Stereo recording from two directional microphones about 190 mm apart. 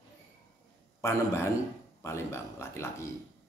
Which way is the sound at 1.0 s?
15° left (ahead or behind).